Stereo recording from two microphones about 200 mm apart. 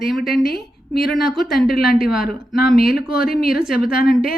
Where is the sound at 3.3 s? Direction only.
50° left (ahead or behind).